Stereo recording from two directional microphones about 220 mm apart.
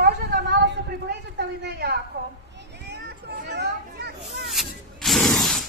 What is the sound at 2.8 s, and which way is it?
Children playing, 50° right (ahead or behind).